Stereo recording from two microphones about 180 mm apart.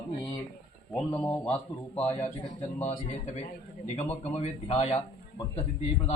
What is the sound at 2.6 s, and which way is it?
A man's voice, 40° left (ahead or behind).